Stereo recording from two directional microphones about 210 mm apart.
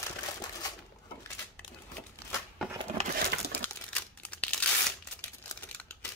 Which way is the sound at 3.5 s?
5° left (ahead or behind).